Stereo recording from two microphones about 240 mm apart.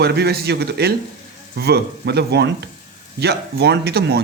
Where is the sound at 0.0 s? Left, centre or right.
Right.